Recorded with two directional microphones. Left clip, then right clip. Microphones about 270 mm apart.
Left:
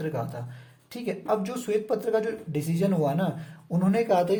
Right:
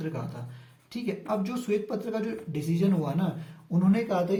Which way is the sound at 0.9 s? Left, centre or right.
Left.